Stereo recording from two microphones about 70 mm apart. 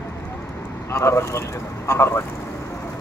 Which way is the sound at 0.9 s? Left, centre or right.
Left.